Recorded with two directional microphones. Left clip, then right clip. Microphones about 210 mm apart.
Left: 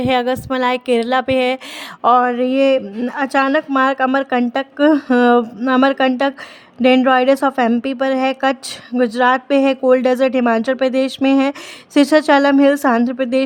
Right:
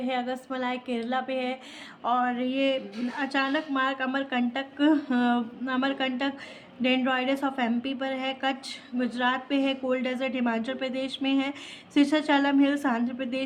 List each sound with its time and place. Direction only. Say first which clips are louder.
0.0 s a woman's voice: left 14 dB; 50° left (ahead or behind)